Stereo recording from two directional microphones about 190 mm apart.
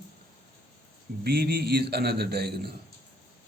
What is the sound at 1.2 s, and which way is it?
Speech, 55° right (ahead or behind).